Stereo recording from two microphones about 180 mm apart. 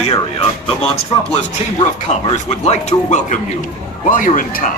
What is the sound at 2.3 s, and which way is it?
A man's voice, 40° left (ahead or behind).